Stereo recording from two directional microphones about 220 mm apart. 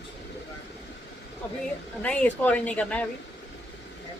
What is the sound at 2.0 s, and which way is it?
Speech, 5° left (ahead or behind).